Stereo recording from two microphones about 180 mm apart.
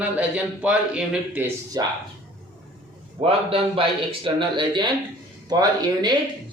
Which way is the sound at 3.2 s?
30° right (ahead or behind).